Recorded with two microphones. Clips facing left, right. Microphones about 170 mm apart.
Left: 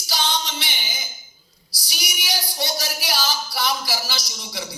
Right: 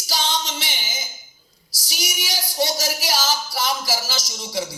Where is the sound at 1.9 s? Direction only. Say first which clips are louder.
Even; 40° right (ahead or behind).